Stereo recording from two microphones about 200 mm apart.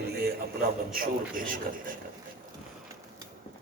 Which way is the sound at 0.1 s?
50° right (ahead or behind).